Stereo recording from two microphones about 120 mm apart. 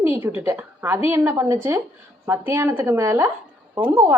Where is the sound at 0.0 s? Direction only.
20° right (ahead or behind).